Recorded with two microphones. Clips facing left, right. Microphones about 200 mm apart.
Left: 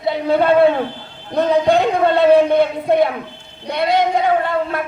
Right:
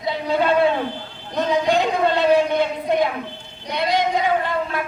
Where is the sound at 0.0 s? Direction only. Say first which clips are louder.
Left 5 dB; 60° left (ahead or behind).